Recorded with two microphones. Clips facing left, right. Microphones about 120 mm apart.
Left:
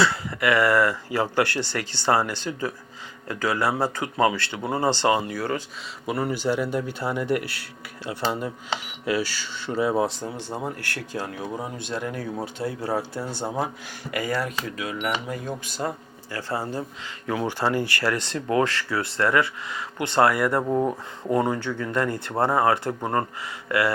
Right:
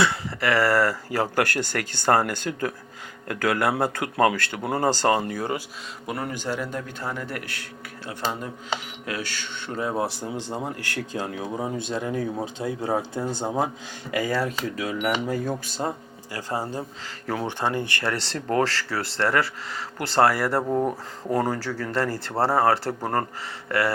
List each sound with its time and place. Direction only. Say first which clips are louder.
0.0 s a man's voice: left 1 dB; 25° right (ahead or behind); by 5.4 s 45° right (ahead or behind)
5.4 s speech: left 1 dB; 15° right (ahead or behind)
6.1 s speech: left 5 dB; centre (ahead or behind)
10.2 s speech: right 1 dB; 15° right (ahead or behind)
16.5 s speech: even; 15° right (ahead or behind); by 20.6 s 30° right (ahead or behind)
20.6 s speech: left 1 dB; centre (ahead or behind)
21.9 s speech: even; 30° right (ahead or behind)
23.6 s mantra: left 1 dB; 30° right (ahead or behind)